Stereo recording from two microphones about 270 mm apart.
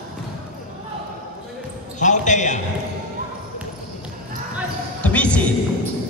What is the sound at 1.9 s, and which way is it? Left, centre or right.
Basketball bounce, left.